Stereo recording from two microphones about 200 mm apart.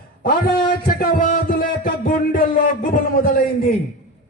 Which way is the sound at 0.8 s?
45° left (ahead or behind).